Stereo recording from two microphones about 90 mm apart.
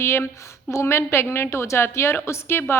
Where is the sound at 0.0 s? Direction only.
30° left (ahead or behind).